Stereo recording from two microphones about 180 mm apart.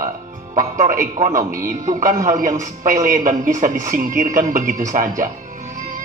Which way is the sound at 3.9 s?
45° right (ahead or behind).